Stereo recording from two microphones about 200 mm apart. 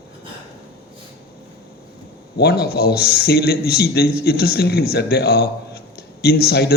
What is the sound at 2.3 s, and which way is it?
A man's voice, 50° left (ahead or behind).